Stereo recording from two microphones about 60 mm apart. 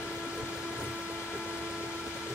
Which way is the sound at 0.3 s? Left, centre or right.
Centre.